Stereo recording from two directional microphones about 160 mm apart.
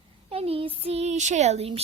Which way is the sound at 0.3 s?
40° right (ahead or behind).